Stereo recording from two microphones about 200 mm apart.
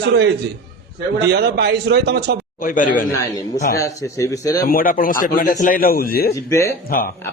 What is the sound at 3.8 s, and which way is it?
Speech, 15° left (ahead or behind).